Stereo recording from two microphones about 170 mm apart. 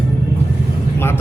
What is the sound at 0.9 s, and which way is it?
Vehicle, 15° left (ahead or behind).